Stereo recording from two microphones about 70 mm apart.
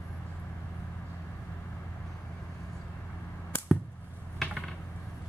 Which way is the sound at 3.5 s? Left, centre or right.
Left.